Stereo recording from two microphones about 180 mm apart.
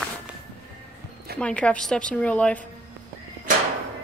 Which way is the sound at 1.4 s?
5° left (ahead or behind).